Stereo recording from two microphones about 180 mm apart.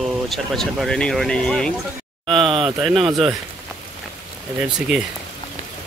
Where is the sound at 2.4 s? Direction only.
30° right (ahead or behind).